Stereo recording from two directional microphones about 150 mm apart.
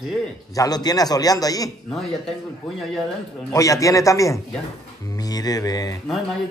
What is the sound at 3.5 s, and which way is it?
Speech, 20° left (ahead or behind).